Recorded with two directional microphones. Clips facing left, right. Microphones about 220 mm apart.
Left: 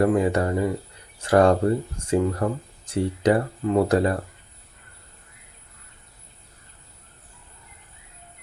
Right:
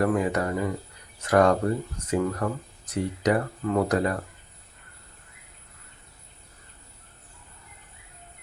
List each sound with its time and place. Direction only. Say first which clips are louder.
0.0 s speech: left 4 dB; 30° left (ahead or behind)